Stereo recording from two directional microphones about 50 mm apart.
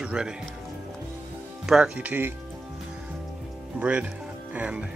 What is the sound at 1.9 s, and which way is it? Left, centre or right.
Speech, right.